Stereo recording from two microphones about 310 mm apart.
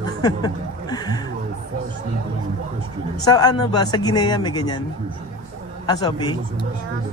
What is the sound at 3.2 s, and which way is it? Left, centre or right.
Speech, centre.